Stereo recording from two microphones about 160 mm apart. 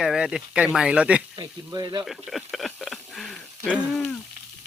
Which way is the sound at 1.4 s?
25° right (ahead or behind).